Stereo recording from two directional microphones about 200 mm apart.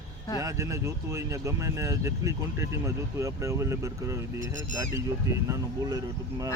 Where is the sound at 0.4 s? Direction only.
15° right (ahead or behind).